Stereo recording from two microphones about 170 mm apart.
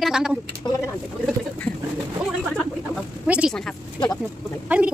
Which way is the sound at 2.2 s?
5° left (ahead or behind).